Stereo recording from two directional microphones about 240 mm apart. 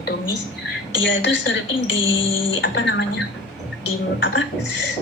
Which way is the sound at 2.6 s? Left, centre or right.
Left.